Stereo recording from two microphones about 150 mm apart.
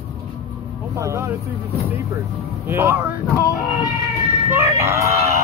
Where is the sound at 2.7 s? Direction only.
15° right (ahead or behind).